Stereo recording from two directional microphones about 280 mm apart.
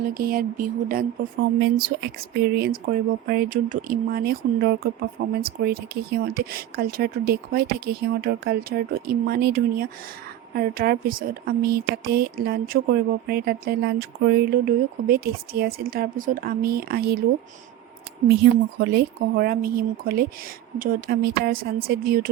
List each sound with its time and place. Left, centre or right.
0.0 s speech: right
18.4 s speech: right